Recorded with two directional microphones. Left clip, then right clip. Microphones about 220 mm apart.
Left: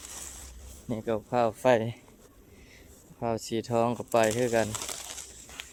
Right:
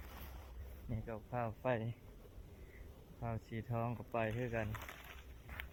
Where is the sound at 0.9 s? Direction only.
15° left (ahead or behind).